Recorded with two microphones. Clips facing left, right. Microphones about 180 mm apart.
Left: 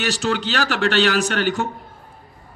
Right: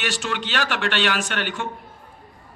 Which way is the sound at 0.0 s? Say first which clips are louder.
Left 5 dB; 40° left (ahead or behind).